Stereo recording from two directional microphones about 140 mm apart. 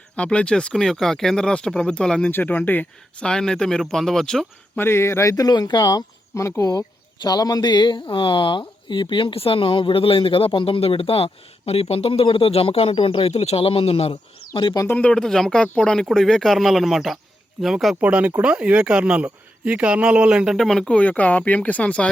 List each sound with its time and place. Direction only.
0.2 s speech: 5° left (ahead or behind)
4.8 s speech: 20° left (ahead or behind); by 14.8 s 35° left (ahead or behind)
14.8 s speech: 10° left (ahead or behind)